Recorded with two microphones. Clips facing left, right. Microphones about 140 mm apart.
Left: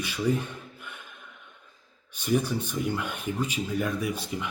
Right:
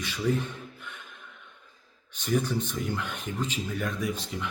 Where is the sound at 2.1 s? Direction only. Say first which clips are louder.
Left 1 dB; 10° left (ahead or behind).